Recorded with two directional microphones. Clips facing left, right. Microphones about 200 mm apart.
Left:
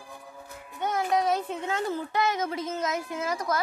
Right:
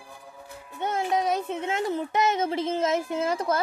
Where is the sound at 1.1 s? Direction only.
20° right (ahead or behind).